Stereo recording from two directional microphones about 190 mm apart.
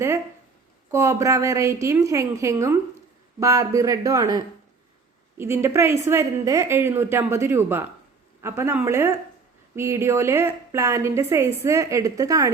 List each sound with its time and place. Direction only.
0.9 s a woman's voice: 15° right (ahead or behind)